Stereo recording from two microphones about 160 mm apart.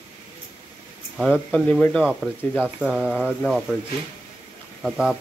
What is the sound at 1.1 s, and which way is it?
Speech, 5° left (ahead or behind).